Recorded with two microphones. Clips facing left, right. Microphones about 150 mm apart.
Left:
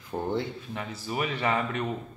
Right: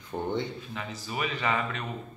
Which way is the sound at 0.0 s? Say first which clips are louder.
Left 1 dB; 5° left (ahead or behind).